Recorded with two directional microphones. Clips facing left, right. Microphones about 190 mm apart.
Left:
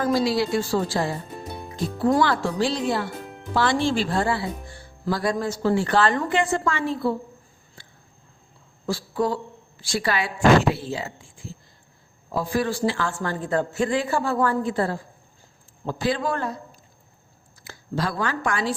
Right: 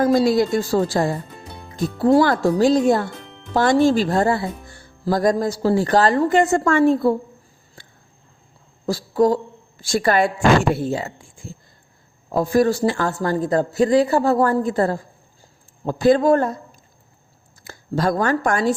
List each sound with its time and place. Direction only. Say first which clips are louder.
0.0 s speech: right 6 dB; 45° right (ahead or behind)
2.0 s speech: right 6 dB; 30° right (ahead or behind)
2.2 s speech: right 6 dB; 45° right (ahead or behind)
8.9 s speech: right 7 dB; 40° right (ahead or behind)
12.3 s speech: right 7 dB; 45° right (ahead or behind)
17.6 s speech: right 5 dB; 45° right (ahead or behind)